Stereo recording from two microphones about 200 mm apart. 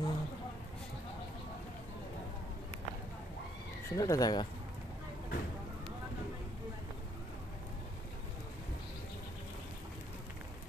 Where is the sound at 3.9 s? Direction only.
15° left (ahead or behind).